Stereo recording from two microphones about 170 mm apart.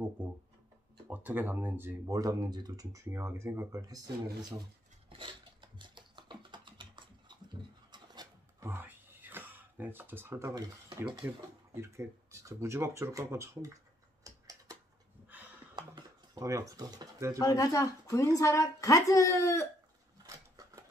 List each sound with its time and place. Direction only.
0.2 s speech: 10° right (ahead or behind)
5.1 s typing: 30° right (ahead or behind)
11.2 s speech: 15° right (ahead or behind)
14.2 s tick-tock: 20° right (ahead or behind)
15.7 s a sound: 20° right (ahead or behind)
17.4 s a woman's voice: 20° left (ahead or behind)
20.2 s a sound: 20° right (ahead or behind)